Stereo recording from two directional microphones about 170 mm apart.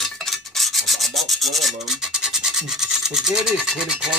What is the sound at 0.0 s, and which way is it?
Rub, centre (ahead or behind).